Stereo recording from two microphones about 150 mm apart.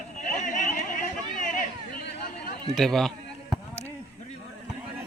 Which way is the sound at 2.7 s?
Centre (ahead or behind).